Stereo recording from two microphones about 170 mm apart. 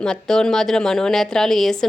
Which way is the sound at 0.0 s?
5° left (ahead or behind).